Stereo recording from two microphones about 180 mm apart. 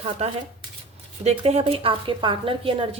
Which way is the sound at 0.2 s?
35° right (ahead or behind).